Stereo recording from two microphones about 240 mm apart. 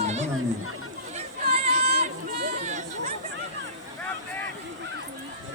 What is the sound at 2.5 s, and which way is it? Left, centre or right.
Chatter, right.